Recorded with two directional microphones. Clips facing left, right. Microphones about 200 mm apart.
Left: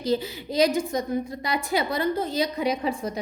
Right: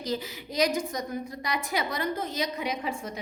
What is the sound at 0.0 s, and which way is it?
A woman's voice, 30° left (ahead or behind).